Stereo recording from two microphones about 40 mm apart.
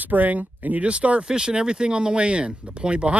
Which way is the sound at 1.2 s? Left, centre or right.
Centre.